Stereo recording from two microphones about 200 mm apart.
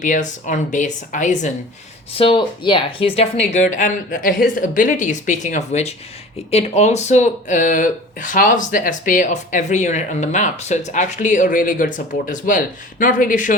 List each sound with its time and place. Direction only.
0.0 s speech: 40° left (ahead or behind)
2.1 s speech: 25° left (ahead or behind); by 13.6 s 40° left (ahead or behind)